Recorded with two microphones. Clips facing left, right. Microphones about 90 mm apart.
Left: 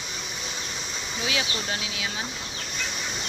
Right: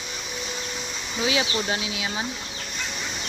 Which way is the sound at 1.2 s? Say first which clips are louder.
Right 5 dB; 25° right (ahead or behind).